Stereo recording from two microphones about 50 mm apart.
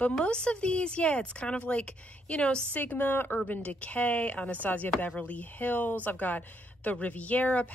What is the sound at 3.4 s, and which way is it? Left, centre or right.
Speech, left.